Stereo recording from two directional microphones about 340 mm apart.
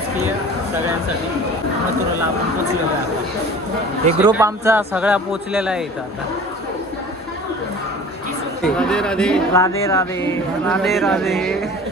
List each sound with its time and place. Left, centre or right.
4.2 s a man's voice: centre
8.7 s a man's voice: centre